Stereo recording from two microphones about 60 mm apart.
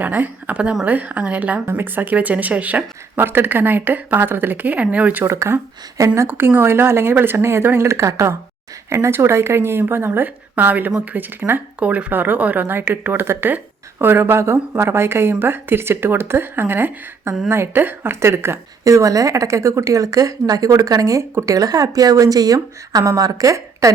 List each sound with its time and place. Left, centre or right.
0.0 s speech: right
0.5 s a woman's voice: right
5.2 s speech: right
11.8 s speech: right
18.9 s a woman's voice: right